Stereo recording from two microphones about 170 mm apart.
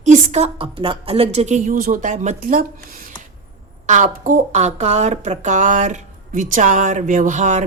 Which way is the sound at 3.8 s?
45° right (ahead or behind).